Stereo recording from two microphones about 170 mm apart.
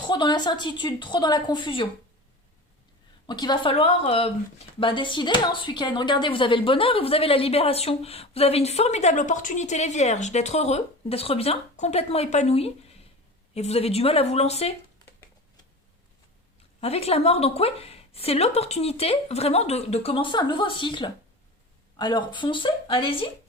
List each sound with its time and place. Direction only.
0.0 s a woman's voice: 25° left (ahead or behind)
3.2 s a woman's voice: 25° left (ahead or behind)
16.8 s a woman's voice: 35° left (ahead or behind)